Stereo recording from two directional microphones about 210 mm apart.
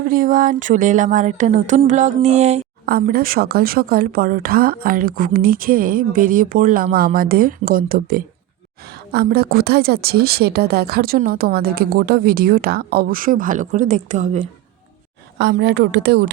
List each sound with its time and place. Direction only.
0.0 s speech: 40° right (ahead or behind)
2.8 s a woman's voice: 45° right (ahead or behind)
15.4 s a woman's voice: 55° right (ahead or behind)